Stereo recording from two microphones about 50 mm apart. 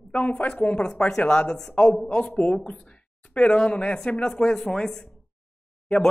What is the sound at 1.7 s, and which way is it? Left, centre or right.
Speech, left.